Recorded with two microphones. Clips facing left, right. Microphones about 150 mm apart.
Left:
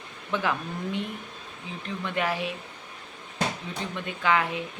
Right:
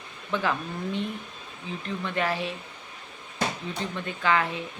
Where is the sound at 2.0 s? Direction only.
10° left (ahead or behind).